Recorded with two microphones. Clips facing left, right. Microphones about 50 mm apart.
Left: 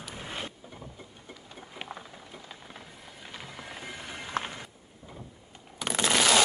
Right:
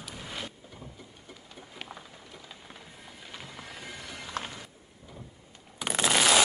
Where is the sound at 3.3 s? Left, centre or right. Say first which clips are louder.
Left 2 dB; centre.